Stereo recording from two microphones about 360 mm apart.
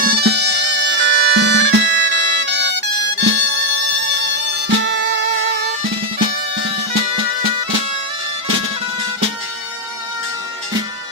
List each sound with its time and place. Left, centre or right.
0.0 s music: right